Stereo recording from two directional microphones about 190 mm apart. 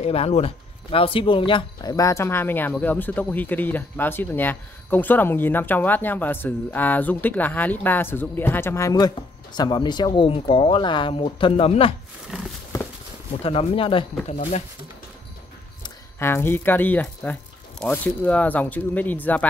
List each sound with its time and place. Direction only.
0.0 s speech: 30° left (ahead or behind)
13.4 s speech: 30° left (ahead or behind)
16.2 s speech: 10° left (ahead or behind)